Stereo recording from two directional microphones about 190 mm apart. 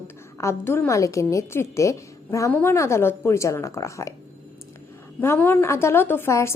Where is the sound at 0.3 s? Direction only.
15° left (ahead or behind).